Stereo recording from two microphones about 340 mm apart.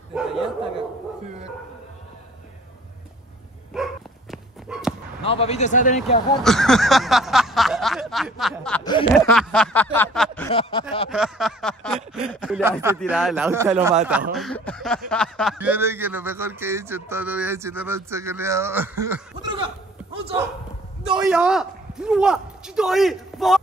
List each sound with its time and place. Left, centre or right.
0.1 s dog: centre
3.7 s dog: centre
4.3 s horse: centre
5.2 s speech: centre
6.4 s speech: centre
10.5 s speech: centre
11.1 s a sound: centre
12.3 s speech: centre
21.1 s a man's voice: centre